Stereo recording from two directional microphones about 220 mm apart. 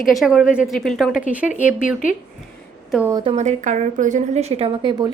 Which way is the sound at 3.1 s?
25° right (ahead or behind).